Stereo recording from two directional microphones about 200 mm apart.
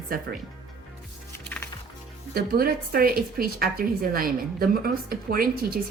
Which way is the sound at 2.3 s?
50° right (ahead or behind).